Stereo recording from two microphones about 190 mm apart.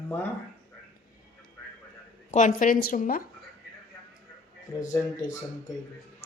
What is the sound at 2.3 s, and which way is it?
Speech, 40° left (ahead or behind).